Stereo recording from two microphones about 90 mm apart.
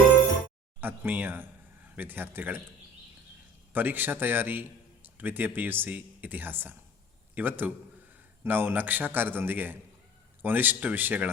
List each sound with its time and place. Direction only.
0.8 s speech: 20° right (ahead or behind)
3.7 s speech: 20° right (ahead or behind)